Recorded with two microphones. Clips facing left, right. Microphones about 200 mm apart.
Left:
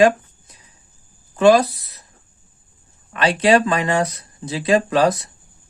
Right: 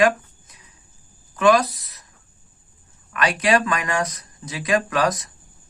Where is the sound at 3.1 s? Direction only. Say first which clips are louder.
Left 4 dB; 30° left (ahead or behind).